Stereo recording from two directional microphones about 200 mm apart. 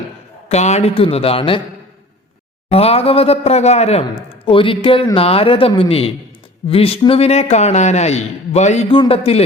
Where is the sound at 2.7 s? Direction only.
30° left (ahead or behind).